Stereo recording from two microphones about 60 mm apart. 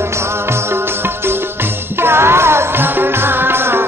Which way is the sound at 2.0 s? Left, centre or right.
Right.